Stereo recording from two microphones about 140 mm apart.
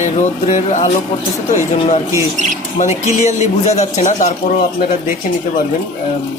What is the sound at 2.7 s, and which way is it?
A man's voice, 55° left (ahead or behind).